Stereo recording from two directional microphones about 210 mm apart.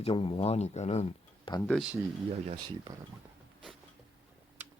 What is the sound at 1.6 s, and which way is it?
Speech, centre (ahead or behind).